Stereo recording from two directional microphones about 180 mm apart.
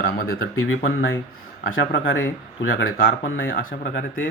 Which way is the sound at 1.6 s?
90° left.